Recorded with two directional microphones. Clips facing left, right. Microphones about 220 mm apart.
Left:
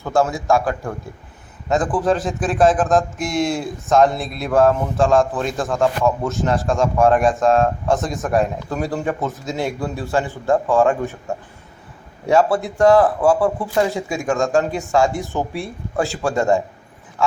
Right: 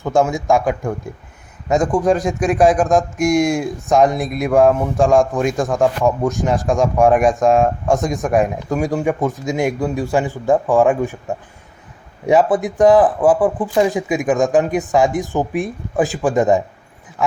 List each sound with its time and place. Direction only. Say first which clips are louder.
0.0 s speech: right 2 dB; 15° right (ahead or behind)
12.2 s speech: right 2 dB; 15° right (ahead or behind)